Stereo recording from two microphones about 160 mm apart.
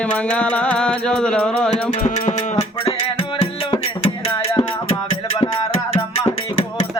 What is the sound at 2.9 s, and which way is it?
Music, 35° left (ahead or behind).